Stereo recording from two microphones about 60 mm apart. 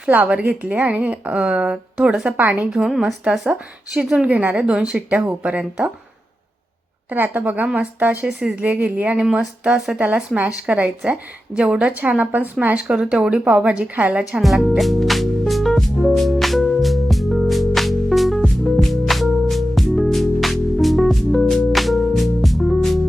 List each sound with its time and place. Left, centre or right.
0.1 s a woman's voice: right
2.8 s speech: centre
3.9 s a woman's voice: centre
7.1 s a woman's voice: right
9.2 s speech: centre
10.3 s a woman's voice: right
12.7 s a woman's voice: centre
14.4 s speech: centre
14.8 s music: centre